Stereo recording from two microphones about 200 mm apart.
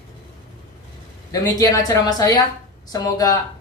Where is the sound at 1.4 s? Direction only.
15° left (ahead or behind).